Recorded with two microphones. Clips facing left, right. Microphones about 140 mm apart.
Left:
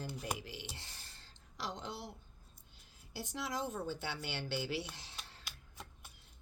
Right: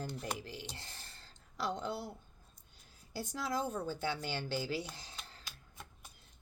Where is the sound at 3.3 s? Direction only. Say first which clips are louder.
Right 3 dB; 45° right (ahead or behind).